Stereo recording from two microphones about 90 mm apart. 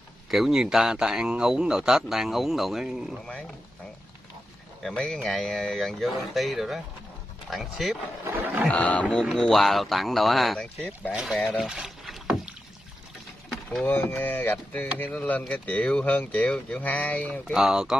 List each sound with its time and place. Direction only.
0.3 s speech: 5° right (ahead or behind)
4.8 s speech: 5° left (ahead or behind)
8.4 s a sound: 20° right (ahead or behind)
8.6 s speech: 15° left (ahead or behind)
11.3 s speech: 10° left (ahead or behind)
11.6 s rowboat: 5° right (ahead or behind)
13.8 s speech: 25° left (ahead or behind)
17.5 s speech: 5° right (ahead or behind)